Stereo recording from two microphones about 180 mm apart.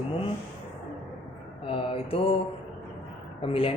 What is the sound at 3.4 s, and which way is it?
Speech, 30° left (ahead or behind).